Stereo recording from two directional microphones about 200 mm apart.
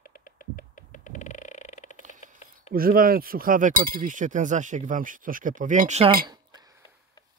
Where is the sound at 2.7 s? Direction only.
45° right (ahead or behind); by 6.6 s 20° right (ahead or behind).